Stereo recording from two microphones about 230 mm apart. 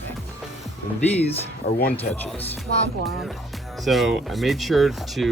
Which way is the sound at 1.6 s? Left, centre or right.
Left.